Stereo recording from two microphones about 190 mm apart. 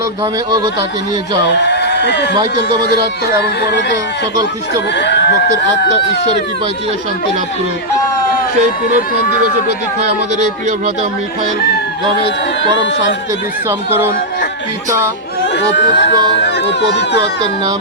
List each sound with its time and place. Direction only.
0.5 s speech: 20° right (ahead or behind)
1.5 s speech: 65° left (ahead or behind)
2.4 s speech: 20° right (ahead or behind)
3.4 s speech: 65° left (ahead or behind)
4.9 s speech: 65° left (ahead or behind)
13.7 s speech: 10° right (ahead or behind)
15.5 s speech: 65° left (ahead or behind)
17.2 s speech: 25° right (ahead or behind)